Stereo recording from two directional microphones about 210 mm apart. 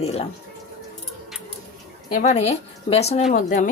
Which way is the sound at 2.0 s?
35° left (ahead or behind).